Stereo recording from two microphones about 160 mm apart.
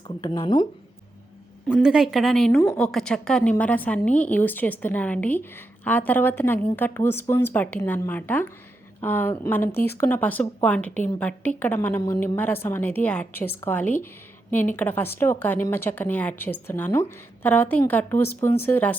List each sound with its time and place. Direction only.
0.2 s speech: 30° left (ahead or behind)
1.7 s a woman's voice: 5° right (ahead or behind); by 18.9 s 10° left (ahead or behind)